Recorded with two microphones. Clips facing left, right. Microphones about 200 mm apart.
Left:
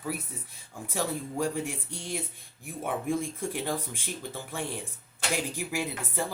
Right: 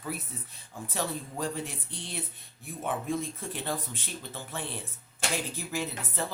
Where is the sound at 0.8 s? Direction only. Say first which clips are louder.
Left 2 dB; 10° left (ahead or behind).